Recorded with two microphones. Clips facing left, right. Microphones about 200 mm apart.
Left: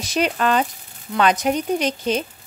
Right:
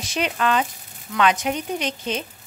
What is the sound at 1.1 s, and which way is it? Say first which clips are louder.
Speech: left 3 dB; 40° left (ahead or behind).